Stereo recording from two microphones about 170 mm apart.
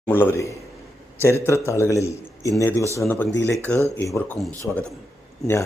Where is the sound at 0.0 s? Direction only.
10° left (ahead or behind).